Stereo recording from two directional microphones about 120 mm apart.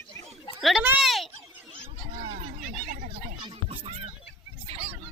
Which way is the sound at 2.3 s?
90° right.